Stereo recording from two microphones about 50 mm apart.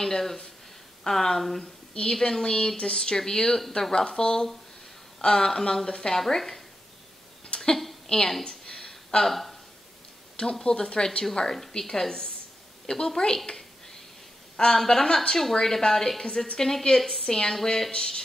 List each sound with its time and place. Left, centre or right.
0.0 s a woman's voice: centre
7.4 s a sound: centre
7.7 s a woman's voice: centre
8.5 s a sound: centre
9.3 s speech: centre
10.3 s a woman's voice: centre
14.6 s a woman's voice: centre
17.9 s a woman's voice: centre